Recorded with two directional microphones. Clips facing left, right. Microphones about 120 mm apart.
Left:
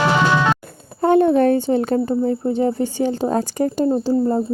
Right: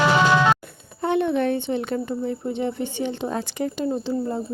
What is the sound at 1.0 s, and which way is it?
Speech, 40° left (ahead or behind).